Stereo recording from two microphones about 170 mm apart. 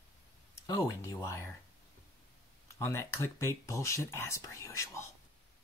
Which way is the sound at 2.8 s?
15° left (ahead or behind).